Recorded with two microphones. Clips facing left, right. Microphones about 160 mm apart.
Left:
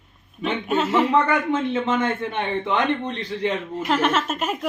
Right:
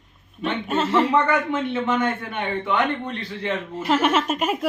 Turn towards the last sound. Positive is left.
turn(degrees=-10)  # may be behind; listen again after turning